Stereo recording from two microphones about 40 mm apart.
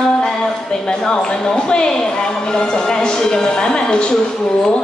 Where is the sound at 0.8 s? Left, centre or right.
Left.